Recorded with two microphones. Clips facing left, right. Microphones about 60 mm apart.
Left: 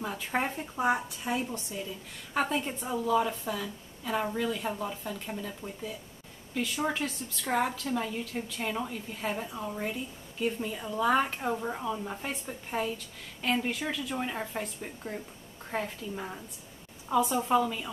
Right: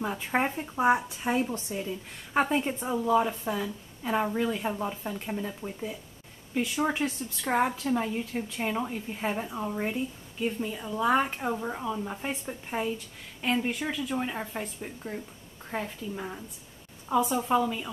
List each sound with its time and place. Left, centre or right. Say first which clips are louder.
0.0 s a woman's voice: right 3 dB; centre
1.2 s a woman's voice: right 4 dB; right
6.5 s a woman's voice: right 3 dB; centre
10.4 s speech: right 1 dB; centre